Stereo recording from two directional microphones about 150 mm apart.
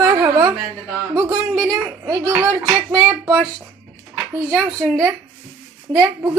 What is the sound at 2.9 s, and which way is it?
Speech, 10° right (ahead or behind).